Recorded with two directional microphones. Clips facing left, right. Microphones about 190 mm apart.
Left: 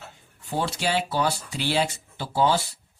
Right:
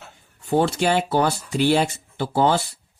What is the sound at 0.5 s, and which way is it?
Speech, 55° right (ahead or behind).